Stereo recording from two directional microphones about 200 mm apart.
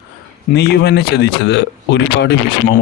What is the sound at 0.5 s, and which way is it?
Speech, 55° left (ahead or behind).